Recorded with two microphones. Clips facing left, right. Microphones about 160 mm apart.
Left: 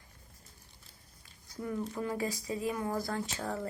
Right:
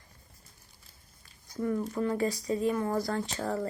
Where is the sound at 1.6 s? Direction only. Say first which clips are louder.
Right 6 dB; centre (ahead or behind).